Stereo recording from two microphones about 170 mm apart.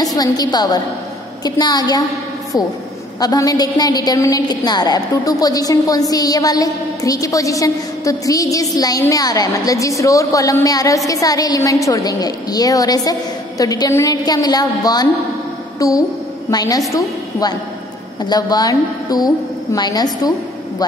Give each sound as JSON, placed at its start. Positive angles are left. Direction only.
{"t": 0.0, "sound": "a woman's voice", "side_deg": 20}
{"t": 3.2, "sound": "a woman's voice", "side_deg": 20}